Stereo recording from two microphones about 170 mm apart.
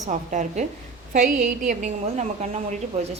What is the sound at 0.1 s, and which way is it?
A woman's voice, 45° right (ahead or behind).